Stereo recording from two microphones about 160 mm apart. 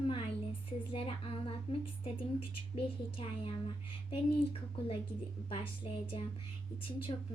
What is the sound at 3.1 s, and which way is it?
Speech, 35° left (ahead or behind).